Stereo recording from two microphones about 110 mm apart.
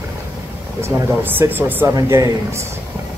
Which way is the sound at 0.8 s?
20° right (ahead or behind).